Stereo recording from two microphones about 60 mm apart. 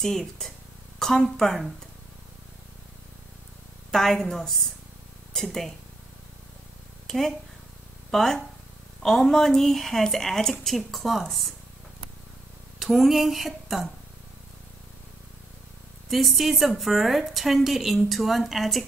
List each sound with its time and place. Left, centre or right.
0.0 s a woman's voice: centre
3.9 s a woman's voice: centre
7.1 s a woman's voice: centre
12.7 s speech: centre
16.1 s a woman's voice: centre